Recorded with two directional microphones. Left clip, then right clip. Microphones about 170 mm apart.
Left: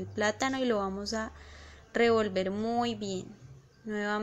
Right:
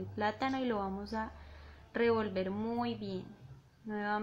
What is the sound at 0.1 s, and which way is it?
Speech, 20° left (ahead or behind).